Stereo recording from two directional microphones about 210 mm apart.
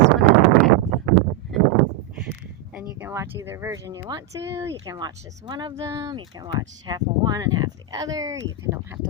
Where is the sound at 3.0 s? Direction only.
10° right (ahead or behind).